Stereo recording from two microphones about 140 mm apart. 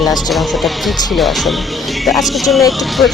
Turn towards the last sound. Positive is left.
turn(degrees=0)  # may be behind; listen again after turning